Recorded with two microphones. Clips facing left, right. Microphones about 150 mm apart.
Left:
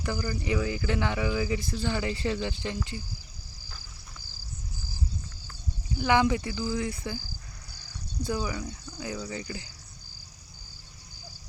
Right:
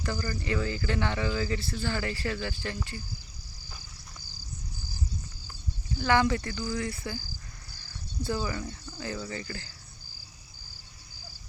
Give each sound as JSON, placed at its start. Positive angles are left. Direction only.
{"t": 0.0, "sound": "speech", "side_deg": 10}
{"t": 5.9, "sound": "speech", "side_deg": 15}
{"t": 8.2, "sound": "speech", "side_deg": 15}